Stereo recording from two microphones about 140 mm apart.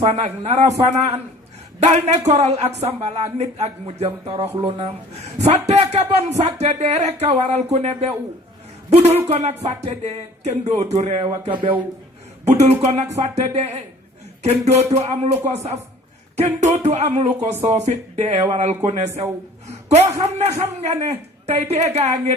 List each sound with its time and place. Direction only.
0.0 s speech: 45° right (ahead or behind)
11.2 s music: 35° right (ahead or behind)
12.8 s a man's voice: 50° right (ahead or behind)